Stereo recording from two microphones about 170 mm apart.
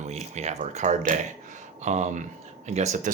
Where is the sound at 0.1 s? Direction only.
40° right (ahead or behind).